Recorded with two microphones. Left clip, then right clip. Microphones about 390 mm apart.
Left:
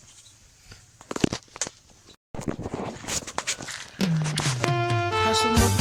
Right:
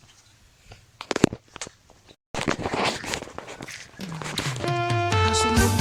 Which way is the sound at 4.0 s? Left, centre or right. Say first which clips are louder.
Left 13 dB; centre.